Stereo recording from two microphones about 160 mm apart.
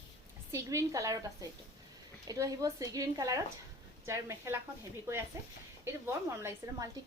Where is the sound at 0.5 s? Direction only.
20° right (ahead or behind).